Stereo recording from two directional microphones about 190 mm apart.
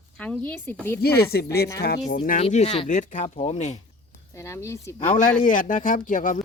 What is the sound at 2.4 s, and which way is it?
Speech, 35° left (ahead or behind).